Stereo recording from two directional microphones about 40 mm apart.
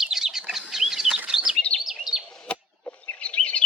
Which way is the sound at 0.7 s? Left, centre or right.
Centre.